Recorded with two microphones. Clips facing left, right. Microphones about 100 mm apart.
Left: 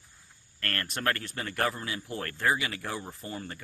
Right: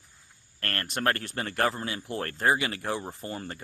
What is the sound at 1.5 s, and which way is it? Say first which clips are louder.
Speech: right 3 dB; 30° right (ahead or behind).